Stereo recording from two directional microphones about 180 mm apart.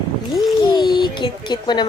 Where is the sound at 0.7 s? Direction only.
25° left (ahead or behind).